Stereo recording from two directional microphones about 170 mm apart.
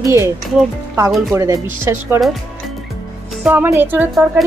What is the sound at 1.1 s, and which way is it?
Speech, centre (ahead or behind).